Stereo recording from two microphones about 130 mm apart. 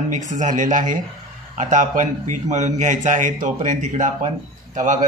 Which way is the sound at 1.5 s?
75° right (ahead or behind).